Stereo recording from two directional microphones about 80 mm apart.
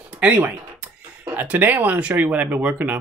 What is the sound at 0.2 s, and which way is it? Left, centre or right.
Speech, centre.